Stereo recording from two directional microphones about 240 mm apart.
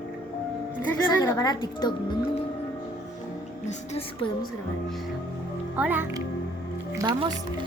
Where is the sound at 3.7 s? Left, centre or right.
Left.